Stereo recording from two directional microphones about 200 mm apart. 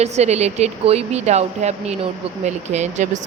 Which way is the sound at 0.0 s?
35° right (ahead or behind).